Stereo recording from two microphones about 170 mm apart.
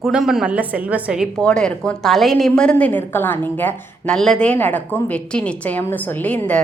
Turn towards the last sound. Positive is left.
turn(degrees=10)  # may be behind; listen again after turning